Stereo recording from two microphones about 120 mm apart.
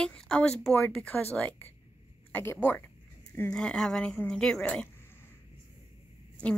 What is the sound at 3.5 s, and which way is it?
Speech, 5° left (ahead or behind).